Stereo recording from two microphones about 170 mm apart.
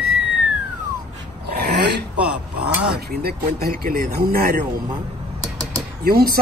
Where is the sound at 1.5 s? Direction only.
70° right (ahead or behind).